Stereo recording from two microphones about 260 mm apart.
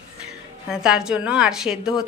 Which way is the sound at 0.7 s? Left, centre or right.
Centre.